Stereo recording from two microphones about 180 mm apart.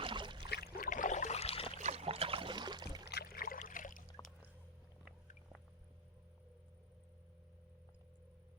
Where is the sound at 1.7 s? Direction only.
40° right (ahead or behind); by 3.0 s 25° right (ahead or behind).